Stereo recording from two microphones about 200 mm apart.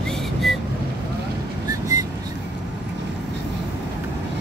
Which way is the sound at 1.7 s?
15° right (ahead or behind).